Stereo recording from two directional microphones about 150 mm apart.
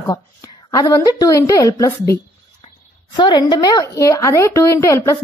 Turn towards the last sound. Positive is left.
turn(degrees=20)  # may be behind; listen again after turning